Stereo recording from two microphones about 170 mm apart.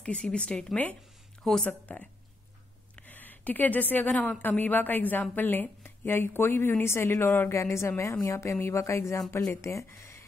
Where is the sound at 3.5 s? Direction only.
10° left (ahead or behind).